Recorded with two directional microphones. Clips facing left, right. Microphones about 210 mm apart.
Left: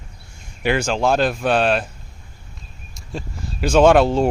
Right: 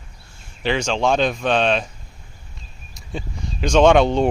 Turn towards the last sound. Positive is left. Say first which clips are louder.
# left 1 dB
turn(degrees=5)  # may be behind; listen again after turning